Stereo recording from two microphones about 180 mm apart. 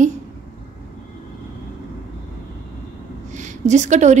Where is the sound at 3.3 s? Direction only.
40° right (ahead or behind).